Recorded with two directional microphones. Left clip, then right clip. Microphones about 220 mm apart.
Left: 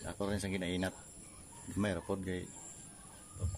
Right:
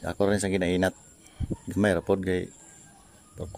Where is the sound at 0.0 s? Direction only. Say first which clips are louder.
Right 13 dB; 35° right (ahead or behind).